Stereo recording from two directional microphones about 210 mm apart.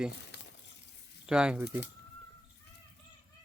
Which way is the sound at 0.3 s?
55° left (ahead or behind).